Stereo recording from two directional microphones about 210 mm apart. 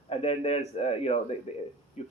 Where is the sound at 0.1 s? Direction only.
30° left (ahead or behind).